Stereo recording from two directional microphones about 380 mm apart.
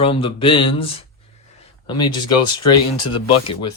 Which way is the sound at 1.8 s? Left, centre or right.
Centre.